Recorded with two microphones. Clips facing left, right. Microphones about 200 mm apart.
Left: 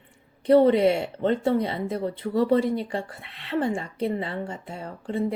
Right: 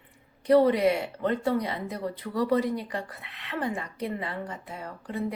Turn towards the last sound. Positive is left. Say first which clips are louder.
# left 5 dB
turn(degrees=30)  # may be behind; listen again after turning